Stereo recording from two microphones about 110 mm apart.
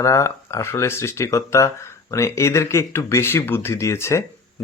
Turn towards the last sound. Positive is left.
turn(degrees=25)  # may be behind; listen again after turning